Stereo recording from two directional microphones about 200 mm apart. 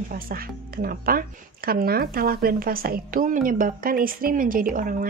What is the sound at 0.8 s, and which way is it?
A woman's voice, 45° right (ahead or behind).